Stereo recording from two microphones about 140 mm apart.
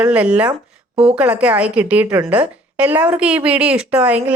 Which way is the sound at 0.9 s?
45° right (ahead or behind).